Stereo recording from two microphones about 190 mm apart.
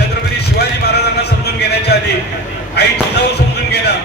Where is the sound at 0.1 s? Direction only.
60° left (ahead or behind).